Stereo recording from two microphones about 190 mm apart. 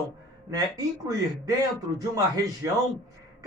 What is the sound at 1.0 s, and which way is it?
Speech, 20° right (ahead or behind).